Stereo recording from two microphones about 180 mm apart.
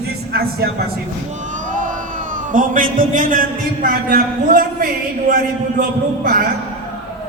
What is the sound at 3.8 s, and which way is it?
A man's voice, 50° right (ahead or behind).